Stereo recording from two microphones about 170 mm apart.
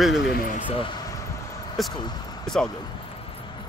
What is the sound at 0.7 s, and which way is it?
Speech, 30° left (ahead or behind).